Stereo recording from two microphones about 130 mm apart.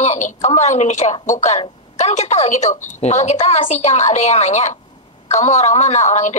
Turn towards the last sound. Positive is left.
turn(degrees=65)  # may be behind; listen again after turning